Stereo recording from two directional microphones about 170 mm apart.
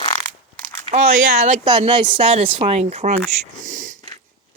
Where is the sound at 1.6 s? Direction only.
30° right (ahead or behind).